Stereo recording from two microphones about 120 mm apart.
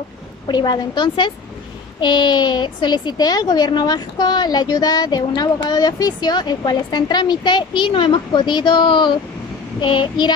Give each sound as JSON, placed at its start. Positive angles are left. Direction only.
{"t": 0.5, "sound": "a woman's voice", "side_deg": 35}